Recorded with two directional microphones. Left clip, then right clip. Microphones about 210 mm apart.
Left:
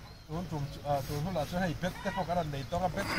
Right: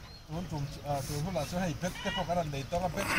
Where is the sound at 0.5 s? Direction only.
25° right (ahead or behind).